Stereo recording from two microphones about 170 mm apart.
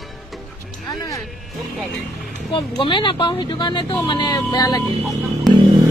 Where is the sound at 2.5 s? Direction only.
25° left (ahead or behind).